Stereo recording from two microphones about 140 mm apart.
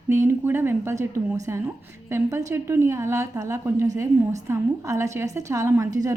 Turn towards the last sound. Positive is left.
turn(degrees=-25)  # may be behind; listen again after turning